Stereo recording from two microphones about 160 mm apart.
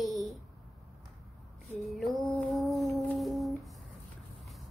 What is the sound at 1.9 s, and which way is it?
Humming, centre (ahead or behind).